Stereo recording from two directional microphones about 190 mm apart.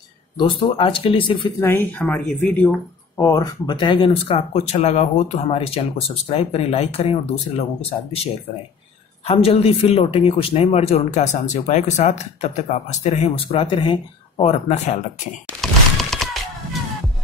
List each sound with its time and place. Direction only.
0.4 s speech: 30° left (ahead or behind)
1.6 s speech: 10° left (ahead or behind)
3.2 s speech: 20° left (ahead or behind)
9.3 s speech: 30° left (ahead or behind)
15.6 s a sound: centre (ahead or behind)